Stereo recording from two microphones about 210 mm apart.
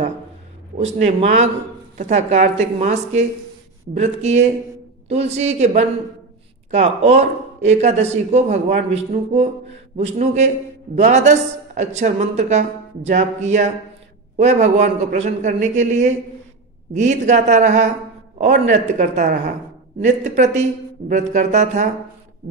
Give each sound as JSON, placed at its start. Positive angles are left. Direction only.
{"t": 0.7, "sound": "speech", "side_deg": -30}